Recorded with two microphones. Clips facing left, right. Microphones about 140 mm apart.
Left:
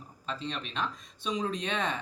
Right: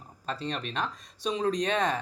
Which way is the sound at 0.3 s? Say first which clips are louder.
Right 3 dB; 40° right (ahead or behind).